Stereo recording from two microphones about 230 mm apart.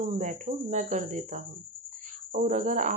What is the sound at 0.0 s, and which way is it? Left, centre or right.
Speech, right.